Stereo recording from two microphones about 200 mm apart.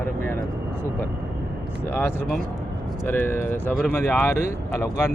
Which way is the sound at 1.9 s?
10° left (ahead or behind).